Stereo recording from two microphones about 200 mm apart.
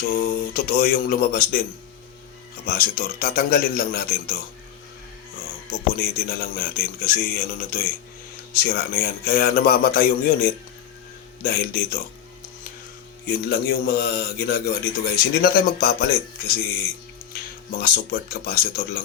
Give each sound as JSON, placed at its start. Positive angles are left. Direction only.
{"t": 0.1, "sound": "speech", "side_deg": 45}
{"t": 2.6, "sound": "speech", "side_deg": 50}
{"t": 5.9, "sound": "speech", "side_deg": 45}
{"t": 13.2, "sound": "speech", "side_deg": 50}
{"t": 17.3, "sound": "speech", "side_deg": 50}